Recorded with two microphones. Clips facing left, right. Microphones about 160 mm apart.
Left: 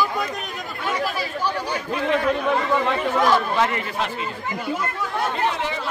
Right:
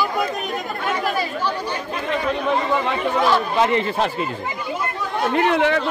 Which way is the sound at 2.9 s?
Centre (ahead or behind).